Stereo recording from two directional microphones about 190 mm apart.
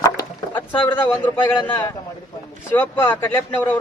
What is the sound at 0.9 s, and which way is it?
Speech, 10° left (ahead or behind).